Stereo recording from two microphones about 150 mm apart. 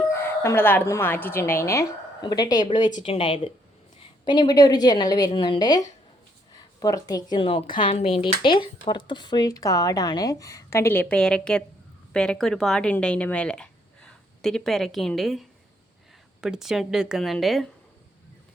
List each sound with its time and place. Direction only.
0.1 s a woman's voice: 15° left (ahead or behind); by 17.7 s centre (ahead or behind)